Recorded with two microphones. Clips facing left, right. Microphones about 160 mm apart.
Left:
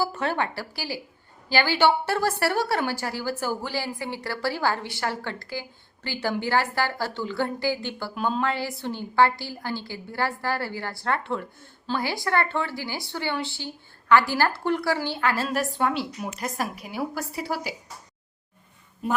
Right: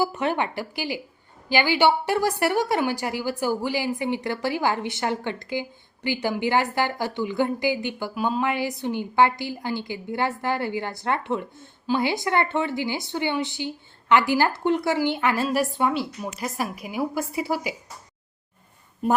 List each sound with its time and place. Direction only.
0.0 s a woman's voice: 20° right (ahead or behind); by 16.6 s centre (ahead or behind)
16.8 s a woman's voice: 10° right (ahead or behind)